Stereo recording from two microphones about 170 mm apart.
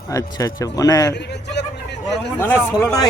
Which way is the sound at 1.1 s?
85° left.